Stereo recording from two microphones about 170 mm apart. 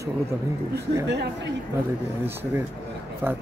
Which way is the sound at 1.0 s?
90° right.